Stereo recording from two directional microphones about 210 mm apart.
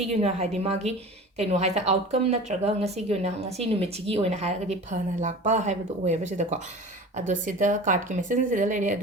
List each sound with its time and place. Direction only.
0.2 s a woman's voice: 30° right (ahead or behind)